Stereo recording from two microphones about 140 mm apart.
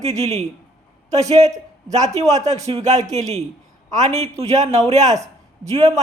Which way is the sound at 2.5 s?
50° right (ahead or behind).